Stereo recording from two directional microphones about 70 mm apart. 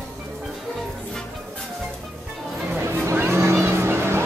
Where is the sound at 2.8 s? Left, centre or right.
Right.